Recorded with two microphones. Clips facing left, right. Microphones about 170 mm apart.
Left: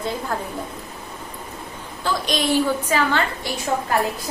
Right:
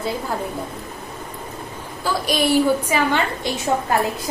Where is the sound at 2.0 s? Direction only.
10° right (ahead or behind).